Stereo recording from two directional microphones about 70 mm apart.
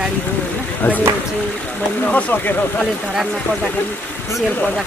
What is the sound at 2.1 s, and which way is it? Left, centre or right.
Speech, left.